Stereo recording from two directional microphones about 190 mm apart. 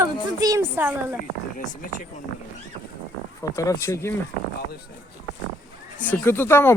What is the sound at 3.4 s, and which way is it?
Speech, 15° left (ahead or behind).